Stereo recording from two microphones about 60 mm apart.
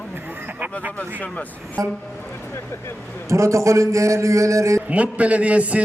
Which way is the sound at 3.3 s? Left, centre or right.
Right.